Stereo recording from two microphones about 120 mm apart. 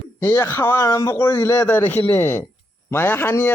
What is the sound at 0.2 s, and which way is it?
A man's voice, 20° left (ahead or behind).